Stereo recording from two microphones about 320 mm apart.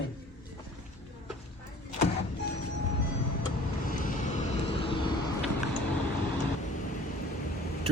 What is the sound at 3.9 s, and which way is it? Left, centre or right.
Vehicle, left.